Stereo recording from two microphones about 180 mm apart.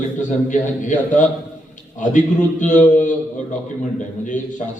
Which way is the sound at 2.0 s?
45° left (ahead or behind).